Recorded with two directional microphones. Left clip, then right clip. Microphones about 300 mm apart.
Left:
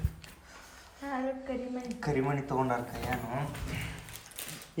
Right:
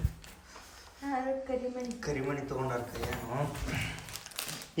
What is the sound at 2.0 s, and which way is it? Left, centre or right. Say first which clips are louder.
Speech: left 4 dB; centre.